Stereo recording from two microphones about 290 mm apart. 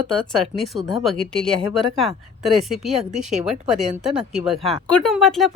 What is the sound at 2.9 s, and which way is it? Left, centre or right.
Speech, right.